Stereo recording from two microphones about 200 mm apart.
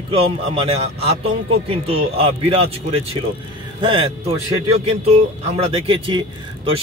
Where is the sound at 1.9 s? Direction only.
30° right (ahead or behind).